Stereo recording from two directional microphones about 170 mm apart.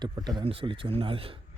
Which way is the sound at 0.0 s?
25° right (ahead or behind).